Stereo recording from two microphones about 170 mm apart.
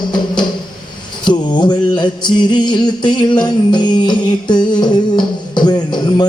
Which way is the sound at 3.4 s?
25° left (ahead or behind).